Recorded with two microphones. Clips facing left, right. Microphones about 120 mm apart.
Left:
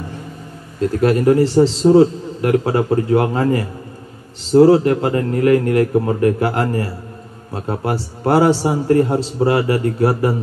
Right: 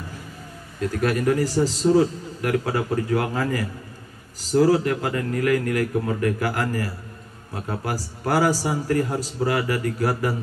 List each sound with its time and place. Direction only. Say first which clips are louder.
0.7 s a man's voice: left 7 dB; 30° left (ahead or behind)